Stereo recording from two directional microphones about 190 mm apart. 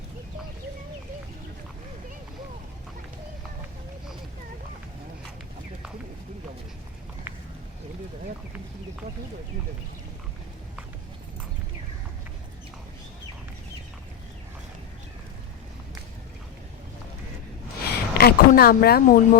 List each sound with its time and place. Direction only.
17.8 s speech: 55° left (ahead or behind)